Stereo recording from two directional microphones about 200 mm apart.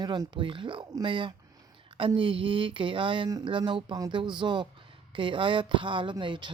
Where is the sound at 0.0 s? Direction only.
20° right (ahead or behind).